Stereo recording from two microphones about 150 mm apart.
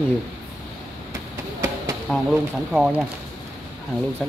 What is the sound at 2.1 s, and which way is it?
Speech, 5° left (ahead or behind).